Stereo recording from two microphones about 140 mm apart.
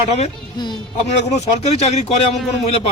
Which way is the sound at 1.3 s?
55° left (ahead or behind).